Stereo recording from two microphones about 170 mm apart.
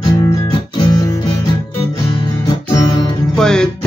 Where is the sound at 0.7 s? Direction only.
25° left (ahead or behind).